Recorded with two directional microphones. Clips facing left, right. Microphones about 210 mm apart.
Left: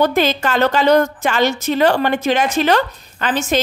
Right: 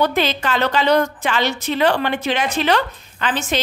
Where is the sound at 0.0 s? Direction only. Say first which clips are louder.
Left 3 dB; 45° left (ahead or behind).